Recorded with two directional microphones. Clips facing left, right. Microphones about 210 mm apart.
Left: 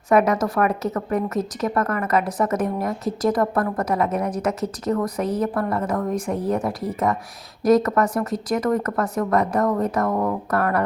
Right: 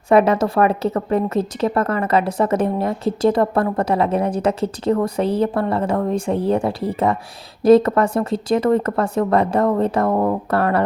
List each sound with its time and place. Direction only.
0.1 s a woman's voice: 30° right (ahead or behind)